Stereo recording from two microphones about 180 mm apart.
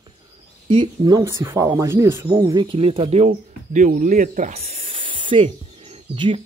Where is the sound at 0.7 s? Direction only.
25° right (ahead or behind).